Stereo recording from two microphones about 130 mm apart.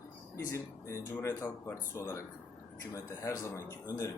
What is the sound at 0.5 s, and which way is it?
Speech, 20° left (ahead or behind).